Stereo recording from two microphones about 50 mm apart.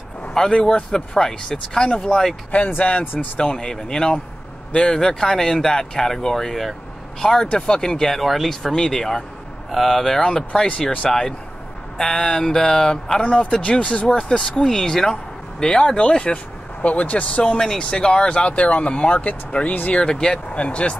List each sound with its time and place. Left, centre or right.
0.3 s speech: centre
2.8 s speech: left
3.3 s speech: centre
13.2 s speech: left
16.8 s speech: left
19.9 s speech: centre